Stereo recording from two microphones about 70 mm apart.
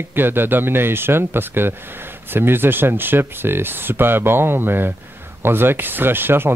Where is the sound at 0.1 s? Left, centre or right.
Right.